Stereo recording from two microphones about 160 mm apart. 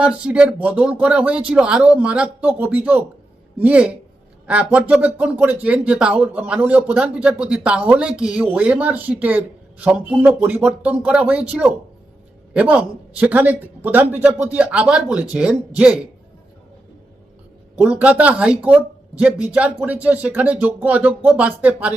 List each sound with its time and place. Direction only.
0.0 s speech: 5° right (ahead or behind)
17.7 s speech: 10° right (ahead or behind)